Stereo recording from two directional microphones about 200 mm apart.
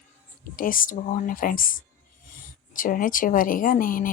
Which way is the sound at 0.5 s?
45° left (ahead or behind).